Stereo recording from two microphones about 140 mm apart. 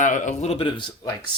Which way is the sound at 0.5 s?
35° left (ahead or behind).